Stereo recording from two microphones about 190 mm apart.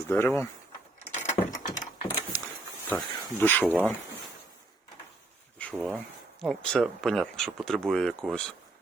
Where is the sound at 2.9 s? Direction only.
10° left (ahead or behind).